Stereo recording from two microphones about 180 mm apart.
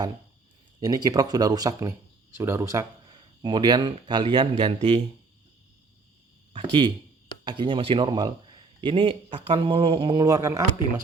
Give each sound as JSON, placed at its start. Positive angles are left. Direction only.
{"t": 0.8, "sound": "a man's voice", "side_deg": -20}
{"t": 6.5, "sound": "a man's voice", "side_deg": -30}